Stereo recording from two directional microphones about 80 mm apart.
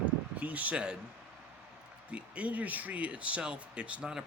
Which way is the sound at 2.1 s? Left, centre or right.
Centre.